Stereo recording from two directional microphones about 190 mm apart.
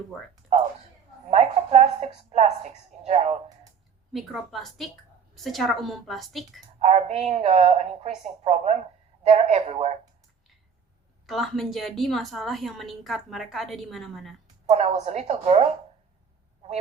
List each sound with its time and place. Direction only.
1.3 s speech: 35° right (ahead or behind)
4.1 s a woman's voice: centre (ahead or behind)
6.7 s a woman's voice: 35° right (ahead or behind)
11.3 s a woman's voice: centre (ahead or behind)
14.7 s a woman's voice: 35° right (ahead or behind)